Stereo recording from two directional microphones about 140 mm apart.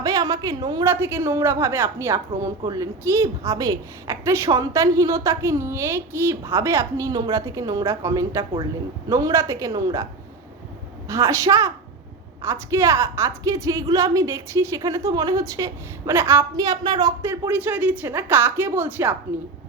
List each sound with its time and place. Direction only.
0.0 s a woman's voice: 25° right (ahead or behind)
0.9 s a woman's voice: 15° right (ahead or behind)
11.1 s a woman's voice: 20° right (ahead or behind)
17.5 s a woman's voice: 15° right (ahead or behind)